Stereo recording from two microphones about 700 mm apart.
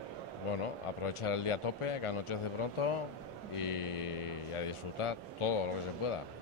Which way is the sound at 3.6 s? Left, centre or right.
Left.